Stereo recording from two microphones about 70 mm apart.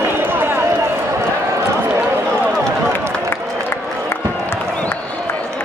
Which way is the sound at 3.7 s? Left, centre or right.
Left.